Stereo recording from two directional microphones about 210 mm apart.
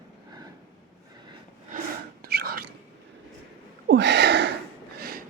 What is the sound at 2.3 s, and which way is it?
Whispering, 45° right (ahead or behind).